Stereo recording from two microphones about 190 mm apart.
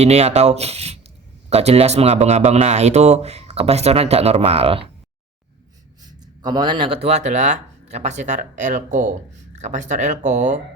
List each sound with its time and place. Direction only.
0.0 s speech: 35° right (ahead or behind)
6.1 s speech: 20° right (ahead or behind); by 10.6 s 40° right (ahead or behind)